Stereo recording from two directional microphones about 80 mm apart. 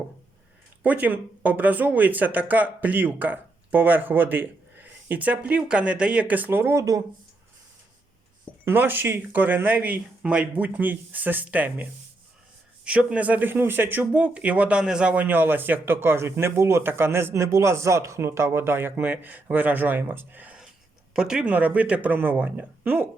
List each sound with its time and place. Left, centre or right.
0.8 s speech: centre
8.6 s speech: right
21.1 s speech: centre